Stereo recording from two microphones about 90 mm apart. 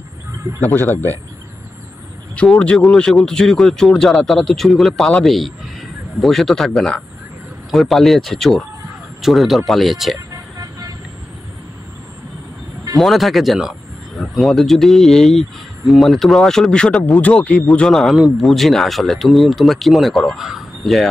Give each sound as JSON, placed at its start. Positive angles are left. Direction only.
{"t": 0.7, "sound": "speech", "side_deg": 20}
{"t": 2.3, "sound": "speech", "side_deg": 10}
{"t": 10.3, "sound": "vehicle", "side_deg": -40}
{"t": 12.9, "sound": "speech", "side_deg": 0}